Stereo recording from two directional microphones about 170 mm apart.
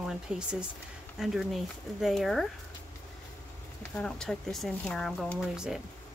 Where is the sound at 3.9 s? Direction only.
5° left (ahead or behind).